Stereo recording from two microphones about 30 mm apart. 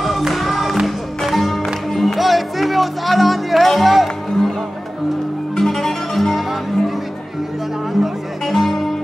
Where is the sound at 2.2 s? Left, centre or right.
Centre.